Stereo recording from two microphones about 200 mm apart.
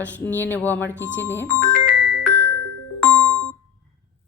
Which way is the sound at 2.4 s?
55° right (ahead or behind).